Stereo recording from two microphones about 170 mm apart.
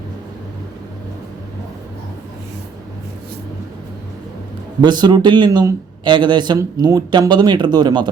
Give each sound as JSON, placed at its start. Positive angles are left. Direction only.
{"t": 4.8, "sound": "a man's voice", "side_deg": -25}